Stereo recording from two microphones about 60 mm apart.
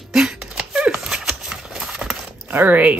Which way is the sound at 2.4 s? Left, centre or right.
Right.